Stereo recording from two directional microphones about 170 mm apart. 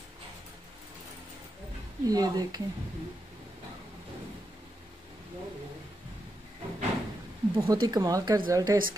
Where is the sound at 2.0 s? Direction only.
20° right (ahead or behind).